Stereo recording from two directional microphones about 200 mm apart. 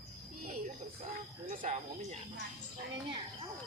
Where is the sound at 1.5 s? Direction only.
35° right (ahead or behind).